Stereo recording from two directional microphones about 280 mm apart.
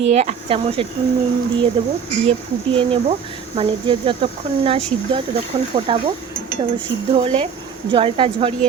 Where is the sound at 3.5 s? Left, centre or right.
Centre.